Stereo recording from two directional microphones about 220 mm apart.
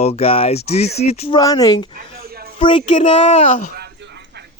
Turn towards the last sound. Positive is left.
turn(degrees=-50)  # may be behind; listen again after turning